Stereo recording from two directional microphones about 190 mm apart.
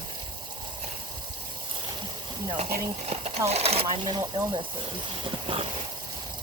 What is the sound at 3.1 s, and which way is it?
Speech, 35° right (ahead or behind).